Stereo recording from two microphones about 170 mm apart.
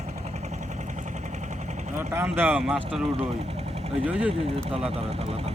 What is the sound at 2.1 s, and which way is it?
Speech, 15° right (ahead or behind).